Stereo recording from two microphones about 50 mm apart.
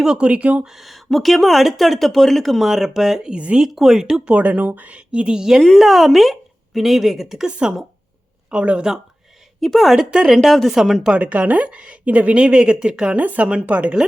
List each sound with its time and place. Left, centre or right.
0.0 s speech: centre
0.3 s speech: right
0.6 s speech: centre
3.3 s speech: right
3.6 s speech: centre
4.3 s speech: right
5.5 s speech: centre
7.4 s speech: centre
9.6 s a woman's voice: centre
9.9 s speech: centre
10.4 s speech: centre
10.8 s speech: centre
11.2 s speech: right; by 13.1 s centre
13.1 s speech: right